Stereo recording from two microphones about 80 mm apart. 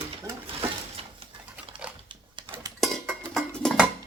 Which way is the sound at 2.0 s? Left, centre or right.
Right.